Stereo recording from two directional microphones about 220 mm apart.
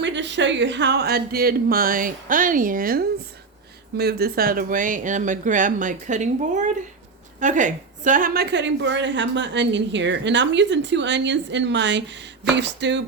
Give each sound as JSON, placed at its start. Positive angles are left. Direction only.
{"t": 0.0, "sound": "a woman's voice", "side_deg": -55}